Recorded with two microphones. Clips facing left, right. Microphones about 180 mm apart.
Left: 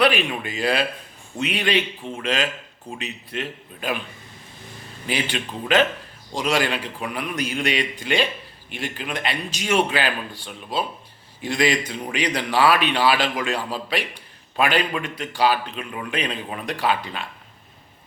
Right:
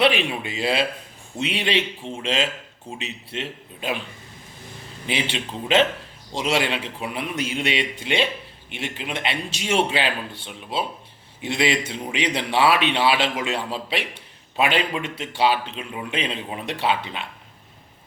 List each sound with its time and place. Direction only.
0.0 s a man's voice: 25° right (ahead or behind)
5.0 s a man's voice: 25° right (ahead or behind)